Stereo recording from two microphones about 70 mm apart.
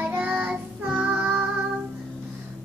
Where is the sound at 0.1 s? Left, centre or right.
Right.